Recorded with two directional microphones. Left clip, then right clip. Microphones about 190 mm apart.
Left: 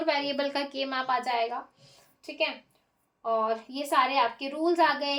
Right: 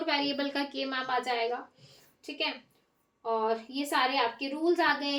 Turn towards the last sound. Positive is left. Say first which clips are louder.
# left 3 dB
turn(degrees=35)  # may be behind; listen again after turning